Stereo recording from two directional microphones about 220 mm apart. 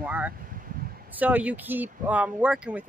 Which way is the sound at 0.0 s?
5° right (ahead or behind).